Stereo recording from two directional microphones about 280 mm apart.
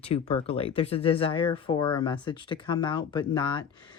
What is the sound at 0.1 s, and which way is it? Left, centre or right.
Speech, left.